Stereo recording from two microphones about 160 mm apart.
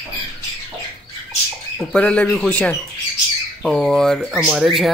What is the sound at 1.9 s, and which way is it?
Speech, 10° left (ahead or behind).